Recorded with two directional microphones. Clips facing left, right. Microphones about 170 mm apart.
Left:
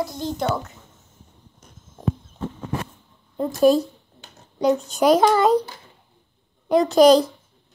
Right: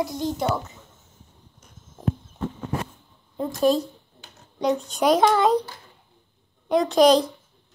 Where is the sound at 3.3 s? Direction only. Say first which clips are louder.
Left 4 dB; 5° left (ahead or behind).